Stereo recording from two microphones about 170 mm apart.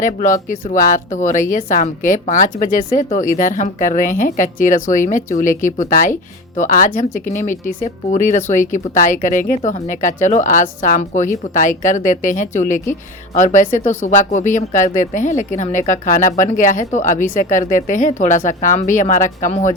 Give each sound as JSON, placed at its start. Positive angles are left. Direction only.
{"t": 0.0, "sound": "speech", "side_deg": 50}